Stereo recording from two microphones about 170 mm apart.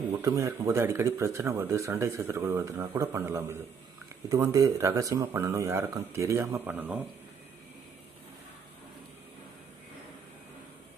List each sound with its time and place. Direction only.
0.2 s speech: 20° right (ahead or behind)